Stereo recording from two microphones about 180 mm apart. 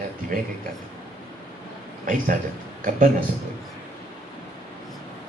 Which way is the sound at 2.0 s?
50° right (ahead or behind).